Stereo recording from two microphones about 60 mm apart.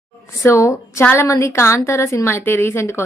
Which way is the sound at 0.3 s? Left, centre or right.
Left.